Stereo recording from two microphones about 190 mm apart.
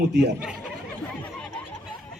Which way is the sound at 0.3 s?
5° right (ahead or behind).